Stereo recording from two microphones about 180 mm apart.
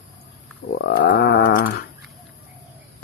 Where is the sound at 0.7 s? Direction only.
70° left (ahead or behind).